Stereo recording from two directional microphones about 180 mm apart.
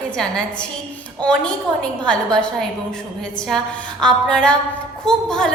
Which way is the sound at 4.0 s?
5° left (ahead or behind).